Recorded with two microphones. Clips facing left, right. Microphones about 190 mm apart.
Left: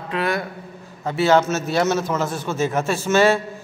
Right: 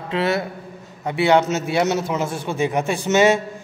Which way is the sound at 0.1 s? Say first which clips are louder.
Right 2 dB; 25° right (ahead or behind).